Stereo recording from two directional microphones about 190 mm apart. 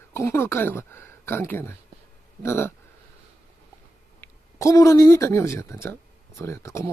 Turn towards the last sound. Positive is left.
turn(degrees=15)  # may be behind; listen again after turning